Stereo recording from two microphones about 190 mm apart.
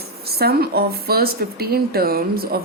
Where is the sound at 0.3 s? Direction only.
55° right (ahead or behind).